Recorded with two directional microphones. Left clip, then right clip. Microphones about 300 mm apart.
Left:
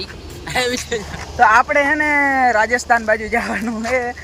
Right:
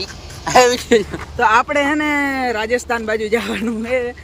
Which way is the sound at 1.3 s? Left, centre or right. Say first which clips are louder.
Left 2 dB; centre.